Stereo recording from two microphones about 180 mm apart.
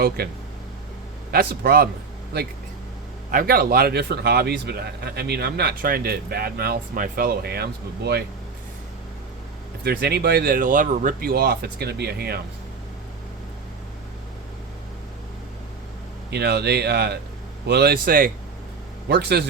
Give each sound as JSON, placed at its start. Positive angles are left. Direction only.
{"t": 0.2, "sound": "a man's voice", "side_deg": -60}
{"t": 3.3, "sound": "a man's voice", "side_deg": -55}
{"t": 9.8, "sound": "a man's voice", "side_deg": -60}
{"t": 16.3, "sound": "a man's voice", "side_deg": -65}
{"t": 19.0, "sound": "a man's voice", "side_deg": -65}